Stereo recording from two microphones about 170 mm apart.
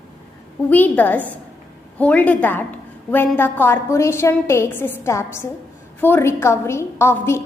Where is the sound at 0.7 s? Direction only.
10° left (ahead or behind).